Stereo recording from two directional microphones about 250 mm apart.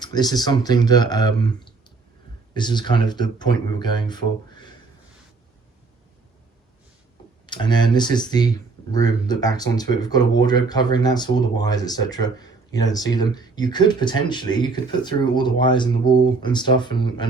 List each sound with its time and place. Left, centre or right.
0.0 s speech: centre
7.4 s speech: centre